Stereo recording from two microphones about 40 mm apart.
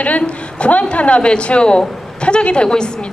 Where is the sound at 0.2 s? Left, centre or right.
Left.